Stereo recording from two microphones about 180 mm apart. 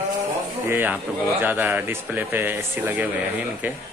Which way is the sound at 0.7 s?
10° right (ahead or behind).